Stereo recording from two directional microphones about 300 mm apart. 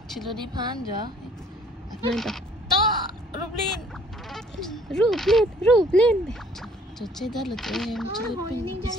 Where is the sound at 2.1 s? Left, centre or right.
Centre.